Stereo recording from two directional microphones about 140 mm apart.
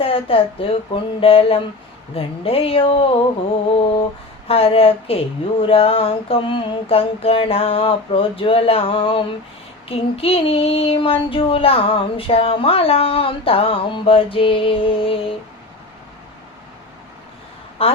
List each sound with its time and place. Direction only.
0.0 s child singing: 40° left (ahead or behind)
4.4 s child singing: 45° left (ahead or behind)
17.8 s a woman's voice: 45° left (ahead or behind)